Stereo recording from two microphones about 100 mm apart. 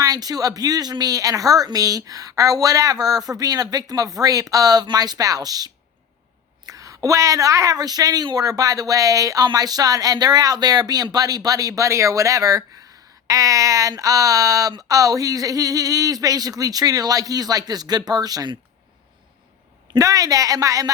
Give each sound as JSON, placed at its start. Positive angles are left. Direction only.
{"t": 0.0, "sound": "speech", "side_deg": -40}
{"t": 20.0, "sound": "speech", "side_deg": -35}